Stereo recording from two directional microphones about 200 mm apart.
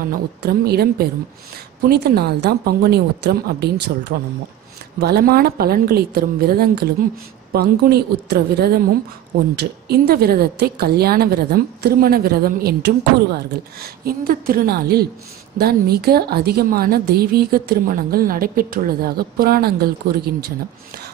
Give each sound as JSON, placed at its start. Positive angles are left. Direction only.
{"t": 0.1, "sound": "a woman's voice", "side_deg": -50}
{"t": 5.0, "sound": "a woman's voice", "side_deg": -50}